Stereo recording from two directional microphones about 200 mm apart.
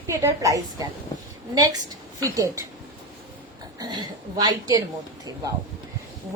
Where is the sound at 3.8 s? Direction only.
20° right (ahead or behind).